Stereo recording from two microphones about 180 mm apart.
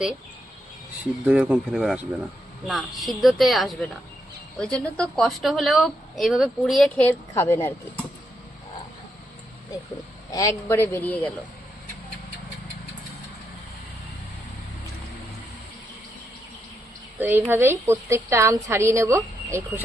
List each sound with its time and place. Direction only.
1.2 s a woman's voice: 10° right (ahead or behind)
7.1 s a woman's voice: 15° left (ahead or behind)
10.3 s a woman's voice: 15° left (ahead or behind)
17.2 s a woman's voice: 10° right (ahead or behind)